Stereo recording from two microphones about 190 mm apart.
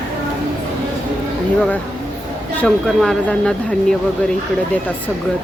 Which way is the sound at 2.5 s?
5° left (ahead or behind).